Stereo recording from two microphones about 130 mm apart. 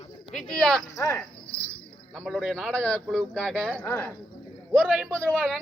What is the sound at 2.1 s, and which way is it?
A woman's voice, 5° left (ahead or behind).